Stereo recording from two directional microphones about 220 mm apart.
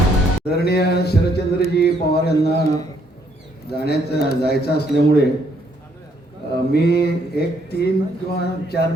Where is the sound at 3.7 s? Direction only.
45° left (ahead or behind).